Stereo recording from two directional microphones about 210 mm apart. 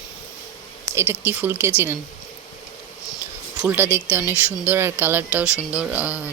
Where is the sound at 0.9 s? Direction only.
10° right (ahead or behind).